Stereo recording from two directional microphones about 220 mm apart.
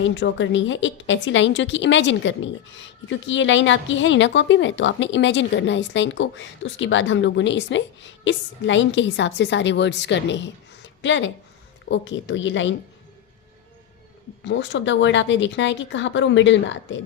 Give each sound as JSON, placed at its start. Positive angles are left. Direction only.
{"t": 0.0, "sound": "a woman's voice", "side_deg": 55}
{"t": 14.4, "sound": "a woman's voice", "side_deg": 55}